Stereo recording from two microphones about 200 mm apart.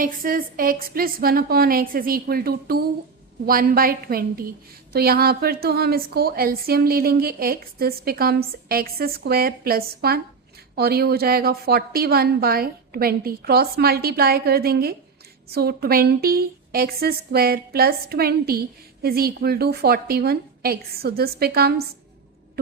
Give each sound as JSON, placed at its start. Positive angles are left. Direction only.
{"t": 0.0, "sound": "a woman's voice", "side_deg": -45}